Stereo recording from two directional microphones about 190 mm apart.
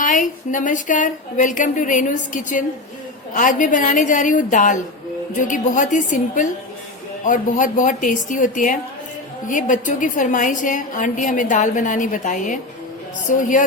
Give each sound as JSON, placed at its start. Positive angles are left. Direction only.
{"t": 0.0, "sound": "a woman's voice", "side_deg": 45}